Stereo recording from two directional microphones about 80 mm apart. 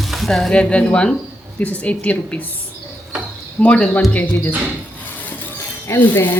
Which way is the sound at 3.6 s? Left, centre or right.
Centre.